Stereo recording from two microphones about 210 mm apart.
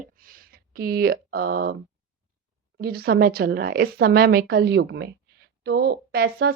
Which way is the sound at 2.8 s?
50° right (ahead or behind).